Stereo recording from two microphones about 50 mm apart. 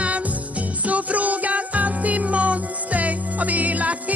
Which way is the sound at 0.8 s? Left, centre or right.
Right.